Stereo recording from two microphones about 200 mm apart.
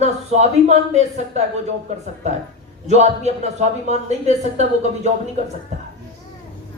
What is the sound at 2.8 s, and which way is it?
Speech, 35° right (ahead or behind).